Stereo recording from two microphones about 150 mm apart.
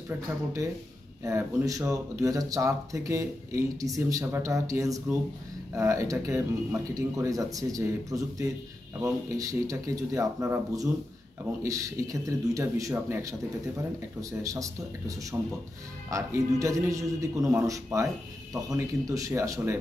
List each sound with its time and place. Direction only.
1.2 s speech: 20° right (ahead or behind)
14.4 s speech: 20° right (ahead or behind)